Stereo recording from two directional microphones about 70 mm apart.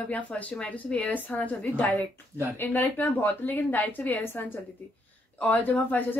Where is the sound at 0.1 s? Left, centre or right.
Left.